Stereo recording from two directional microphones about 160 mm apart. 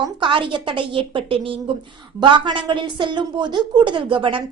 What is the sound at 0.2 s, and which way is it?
A woman's voice, 30° right (ahead or behind).